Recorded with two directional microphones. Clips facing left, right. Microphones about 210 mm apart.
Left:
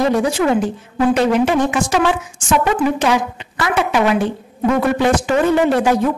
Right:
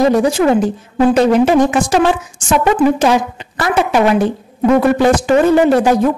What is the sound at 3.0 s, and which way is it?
Speech, 40° right (ahead or behind).